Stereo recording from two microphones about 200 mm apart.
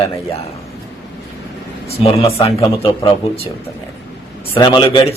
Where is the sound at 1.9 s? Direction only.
30° left (ahead or behind).